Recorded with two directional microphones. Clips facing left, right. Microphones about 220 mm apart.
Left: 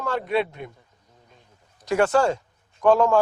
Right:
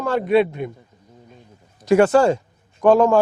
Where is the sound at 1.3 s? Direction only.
10° right (ahead or behind).